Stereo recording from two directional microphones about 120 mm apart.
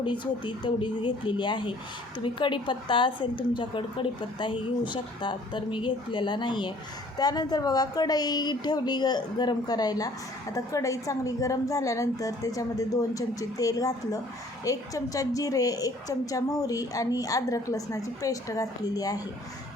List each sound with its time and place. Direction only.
0.0 s a woman's voice: 40° left (ahead or behind)